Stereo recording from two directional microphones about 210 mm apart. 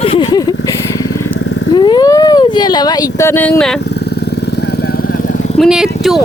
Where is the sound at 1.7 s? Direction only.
20° left (ahead or behind).